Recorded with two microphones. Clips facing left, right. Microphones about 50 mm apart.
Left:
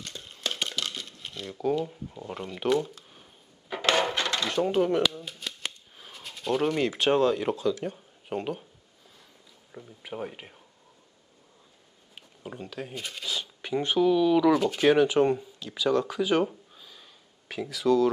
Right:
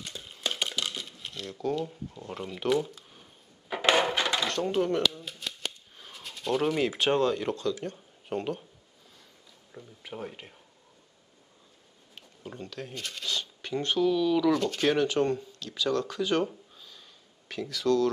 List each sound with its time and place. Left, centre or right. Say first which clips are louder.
0.0 s a sound: even; centre
4.4 s speech: left 3 dB; centre
9.7 s speech: left 3 dB; centre
12.4 s speech: left 2 dB; centre